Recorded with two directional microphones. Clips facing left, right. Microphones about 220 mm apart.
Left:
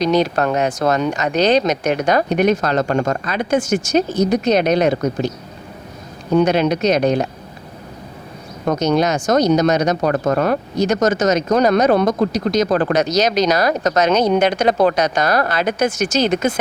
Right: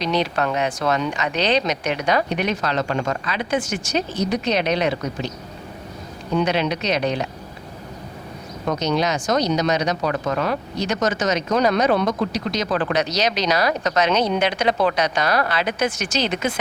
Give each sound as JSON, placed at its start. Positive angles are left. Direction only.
{"t": 0.0, "sound": "speech", "side_deg": 45}
{"t": 6.3, "sound": "speech", "side_deg": 45}
{"t": 8.6, "sound": "speech", "side_deg": 45}